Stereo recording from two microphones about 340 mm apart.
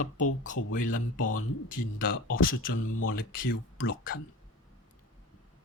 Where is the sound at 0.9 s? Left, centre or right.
Left.